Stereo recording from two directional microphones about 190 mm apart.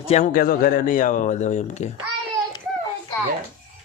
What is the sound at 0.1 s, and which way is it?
Speech, 40° left (ahead or behind).